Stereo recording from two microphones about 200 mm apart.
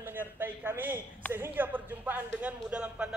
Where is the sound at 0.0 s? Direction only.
10° right (ahead or behind).